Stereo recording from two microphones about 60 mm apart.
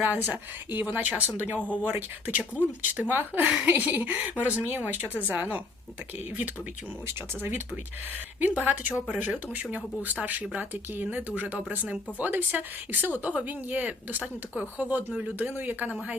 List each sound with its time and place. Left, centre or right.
0.0 s a woman's voice: right
1.5 s speech: left
1.8 s a woman's voice: right
4.9 s a woman's voice: right
8.4 s a woman's voice: right